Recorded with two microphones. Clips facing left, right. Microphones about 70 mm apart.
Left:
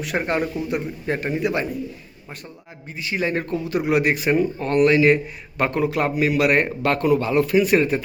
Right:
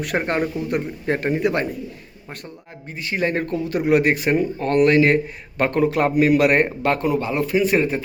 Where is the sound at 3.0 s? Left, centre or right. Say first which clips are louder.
Right 1 dB; right.